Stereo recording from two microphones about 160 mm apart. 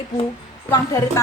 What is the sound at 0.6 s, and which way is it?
Speech, 20° left (ahead or behind).